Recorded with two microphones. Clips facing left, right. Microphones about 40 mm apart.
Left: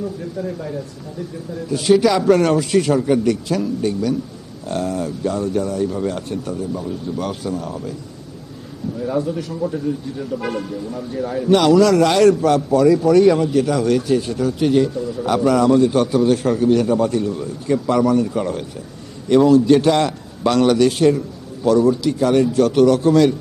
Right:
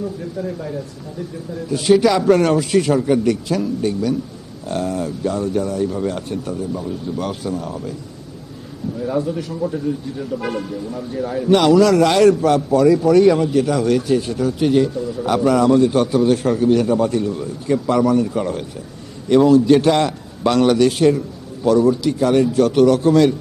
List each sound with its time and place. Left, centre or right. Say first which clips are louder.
0.0 s a man's voice: even; centre
9.0 s speech: even; centre